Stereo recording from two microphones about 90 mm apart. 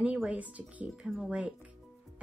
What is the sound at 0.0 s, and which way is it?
A woman's voice, 15° right (ahead or behind).